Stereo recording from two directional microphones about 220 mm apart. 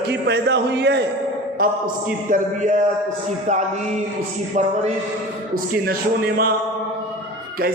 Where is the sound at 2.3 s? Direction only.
35° right (ahead or behind).